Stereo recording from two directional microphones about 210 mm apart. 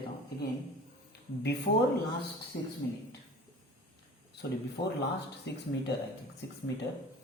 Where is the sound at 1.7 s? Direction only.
35° left (ahead or behind).